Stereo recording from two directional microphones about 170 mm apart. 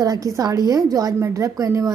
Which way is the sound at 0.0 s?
20° right (ahead or behind).